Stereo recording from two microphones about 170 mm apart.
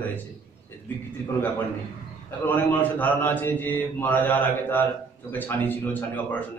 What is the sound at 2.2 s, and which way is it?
A man's voice, 10° left (ahead or behind).